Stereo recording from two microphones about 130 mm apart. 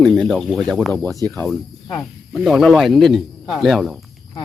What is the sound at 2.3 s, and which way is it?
Speech, 5° right (ahead or behind).